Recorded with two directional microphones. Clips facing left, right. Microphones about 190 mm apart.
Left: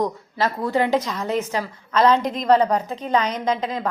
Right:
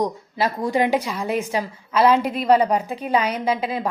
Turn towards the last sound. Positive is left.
turn(degrees=-10)  # may be behind; listen again after turning